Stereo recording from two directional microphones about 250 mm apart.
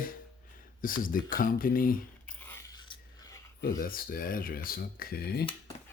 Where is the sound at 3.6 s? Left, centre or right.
Left.